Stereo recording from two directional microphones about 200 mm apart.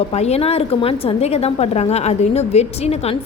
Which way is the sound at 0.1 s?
30° left (ahead or behind).